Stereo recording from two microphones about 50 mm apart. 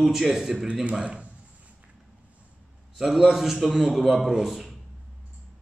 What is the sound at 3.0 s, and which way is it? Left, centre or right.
A man's voice, centre.